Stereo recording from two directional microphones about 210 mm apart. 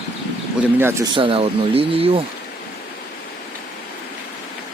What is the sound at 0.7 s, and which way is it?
Speech, 10° right (ahead or behind).